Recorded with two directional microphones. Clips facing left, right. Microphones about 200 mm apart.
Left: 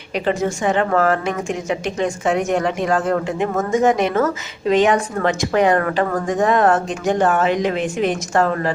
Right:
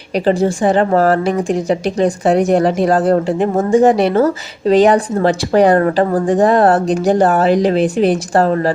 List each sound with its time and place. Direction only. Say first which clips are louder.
0.3 s a woman's voice: right 6 dB; 35° right (ahead or behind)